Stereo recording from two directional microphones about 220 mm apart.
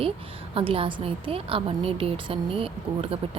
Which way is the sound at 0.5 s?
25° right (ahead or behind).